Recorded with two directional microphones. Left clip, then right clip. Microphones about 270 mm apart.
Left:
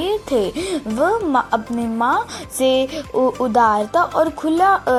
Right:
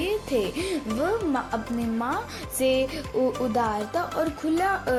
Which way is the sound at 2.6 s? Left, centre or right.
Centre.